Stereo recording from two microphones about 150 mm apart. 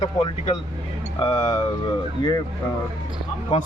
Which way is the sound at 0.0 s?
35° left (ahead or behind).